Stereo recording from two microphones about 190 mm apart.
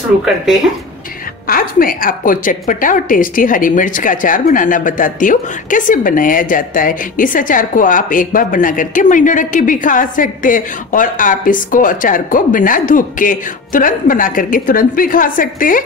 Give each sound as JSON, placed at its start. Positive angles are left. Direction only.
{"t": 1.5, "sound": "a woman's voice", "side_deg": 50}